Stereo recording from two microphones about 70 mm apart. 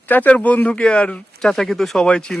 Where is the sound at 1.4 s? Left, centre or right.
Centre.